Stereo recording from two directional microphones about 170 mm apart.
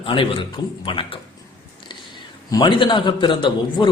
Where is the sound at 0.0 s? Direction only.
30° left (ahead or behind).